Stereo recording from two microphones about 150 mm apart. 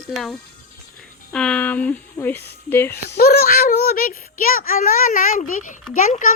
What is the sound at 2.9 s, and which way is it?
A child's voice, 90° left.